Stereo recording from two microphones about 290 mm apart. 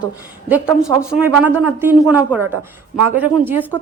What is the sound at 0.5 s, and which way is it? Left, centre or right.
Speech, centre.